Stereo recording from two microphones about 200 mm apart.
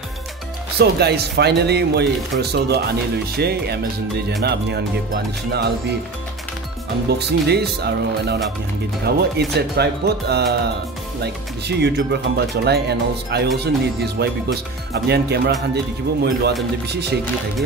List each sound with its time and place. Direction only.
0.7 s speech: 55° right (ahead or behind)
7.1 s speech: 55° right (ahead or behind)